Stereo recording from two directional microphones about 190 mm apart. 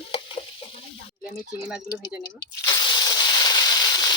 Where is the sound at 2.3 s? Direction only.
20° left (ahead or behind).